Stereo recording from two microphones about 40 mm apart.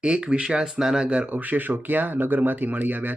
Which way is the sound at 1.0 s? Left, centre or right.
Right.